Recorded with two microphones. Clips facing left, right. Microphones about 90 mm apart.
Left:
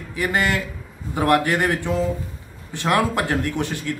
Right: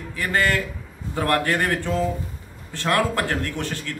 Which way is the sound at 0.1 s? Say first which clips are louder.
Left 1 dB; 15° left (ahead or behind).